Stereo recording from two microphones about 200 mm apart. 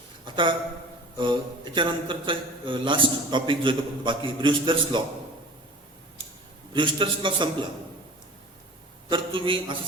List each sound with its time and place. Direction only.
1.2 s a man's voice: 25° right (ahead or behind)
6.7 s a man's voice: 25° right (ahead or behind)
9.0 s a man's voice: 25° right (ahead or behind)